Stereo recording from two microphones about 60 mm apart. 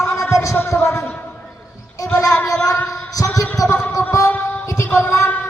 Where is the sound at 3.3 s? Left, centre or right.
Left.